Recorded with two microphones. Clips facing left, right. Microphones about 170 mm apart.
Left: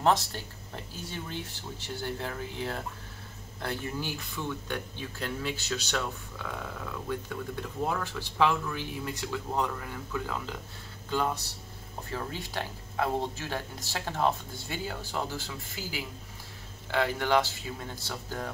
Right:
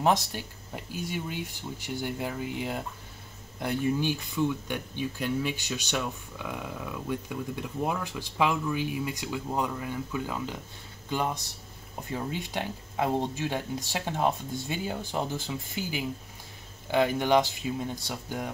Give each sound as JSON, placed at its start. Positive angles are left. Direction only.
{"t": 0.0, "sound": "speech", "side_deg": -10}
{"t": 12.1, "sound": "speech", "side_deg": -20}